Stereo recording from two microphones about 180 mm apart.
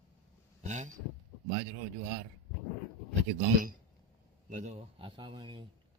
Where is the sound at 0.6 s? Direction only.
40° right (ahead or behind).